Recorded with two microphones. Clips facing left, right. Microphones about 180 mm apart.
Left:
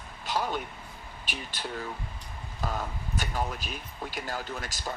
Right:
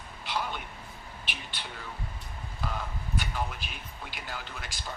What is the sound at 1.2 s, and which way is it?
Speech, 45° left (ahead or behind).